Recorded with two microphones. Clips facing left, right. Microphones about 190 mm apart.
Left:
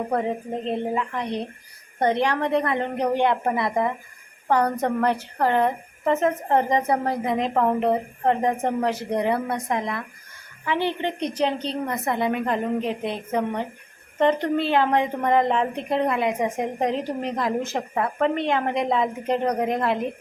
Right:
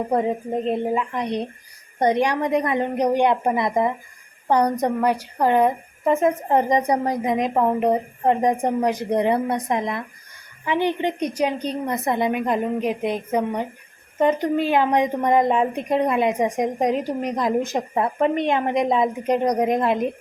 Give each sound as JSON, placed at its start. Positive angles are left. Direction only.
{"t": 0.1, "sound": "a woman's voice", "side_deg": -15}